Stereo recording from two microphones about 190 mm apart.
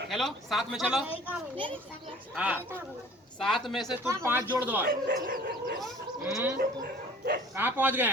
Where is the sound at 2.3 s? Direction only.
10° right (ahead or behind).